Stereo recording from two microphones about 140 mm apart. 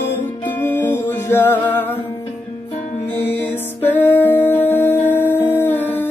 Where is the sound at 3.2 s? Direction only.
15° left (ahead or behind).